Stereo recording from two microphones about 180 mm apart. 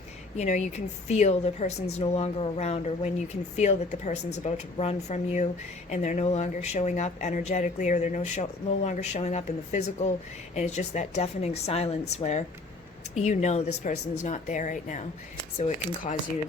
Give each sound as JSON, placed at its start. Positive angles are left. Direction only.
{"t": 0.3, "sound": "speech", "side_deg": 40}